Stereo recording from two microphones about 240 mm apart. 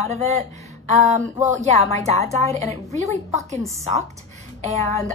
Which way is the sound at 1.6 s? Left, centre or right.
Right.